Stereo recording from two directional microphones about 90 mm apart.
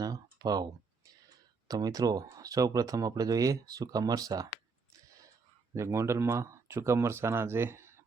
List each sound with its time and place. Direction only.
0.0 s computer keyboard: 45° right (ahead or behind)
1.6 s speech: 45° right (ahead or behind)
5.7 s speech: 30° right (ahead or behind)